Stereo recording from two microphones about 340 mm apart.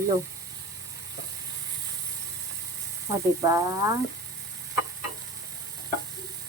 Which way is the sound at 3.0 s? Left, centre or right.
Centre.